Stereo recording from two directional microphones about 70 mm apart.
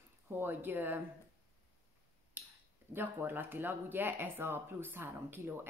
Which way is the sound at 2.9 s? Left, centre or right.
Right.